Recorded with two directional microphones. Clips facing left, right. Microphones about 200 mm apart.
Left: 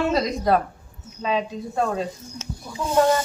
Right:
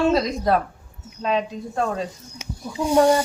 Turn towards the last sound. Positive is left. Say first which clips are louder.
# right 3 dB
turn(degrees=-15)  # may be behind; listen again after turning